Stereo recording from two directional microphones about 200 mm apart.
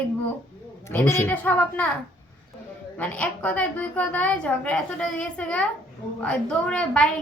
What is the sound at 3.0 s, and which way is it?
A woman's voice, 5° left (ahead or behind).